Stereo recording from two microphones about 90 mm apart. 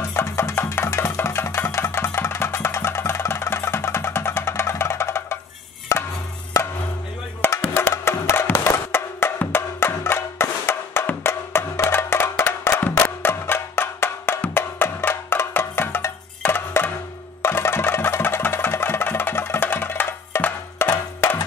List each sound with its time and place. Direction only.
0.1 s music: 30° left (ahead or behind)
7.7 s wood block: 30° left (ahead or behind)
17.4 s music: 30° left (ahead or behind)